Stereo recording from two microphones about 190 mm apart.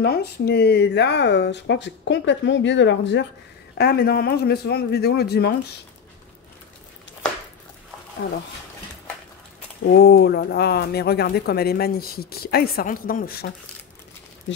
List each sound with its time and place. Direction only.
0.0 s speech: 55° left (ahead or behind)
3.7 s speech: 55° left (ahead or behind)
9.9 s speech: 55° left (ahead or behind)